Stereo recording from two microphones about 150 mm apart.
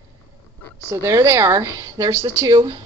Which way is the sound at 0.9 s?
20° right (ahead or behind).